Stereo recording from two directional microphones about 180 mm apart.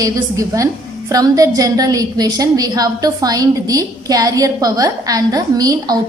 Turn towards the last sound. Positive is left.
turn(degrees=-20)  # may be behind; listen again after turning